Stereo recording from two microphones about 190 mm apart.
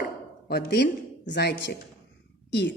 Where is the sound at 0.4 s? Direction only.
55° left (ahead or behind).